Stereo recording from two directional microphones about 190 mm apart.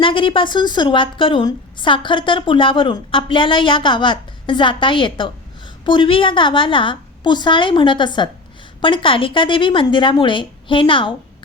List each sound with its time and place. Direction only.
0.0 s speech: 25° left (ahead or behind)